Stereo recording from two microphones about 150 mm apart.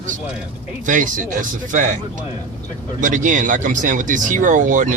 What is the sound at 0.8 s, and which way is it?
Speech, 60° right (ahead or behind).